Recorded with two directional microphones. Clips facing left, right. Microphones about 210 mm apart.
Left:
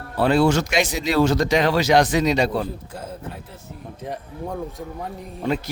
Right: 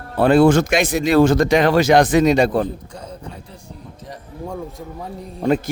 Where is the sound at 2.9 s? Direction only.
5° left (ahead or behind).